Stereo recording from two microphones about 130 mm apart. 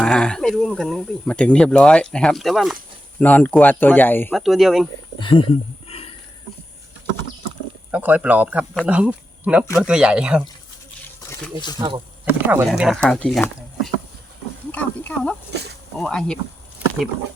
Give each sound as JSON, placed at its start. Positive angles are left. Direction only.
{"t": 0.0, "sound": "speech", "side_deg": 5}
{"t": 3.2, "sound": "speech", "side_deg": 10}
{"t": 4.4, "sound": "speech", "side_deg": 0}
{"t": 5.2, "sound": "speech", "side_deg": 40}
{"t": 7.9, "sound": "speech", "side_deg": -10}
{"t": 11.8, "sound": "speech", "side_deg": -35}
{"t": 12.2, "sound": "speech", "side_deg": -15}
{"t": 13.0, "sound": "speech", "side_deg": 5}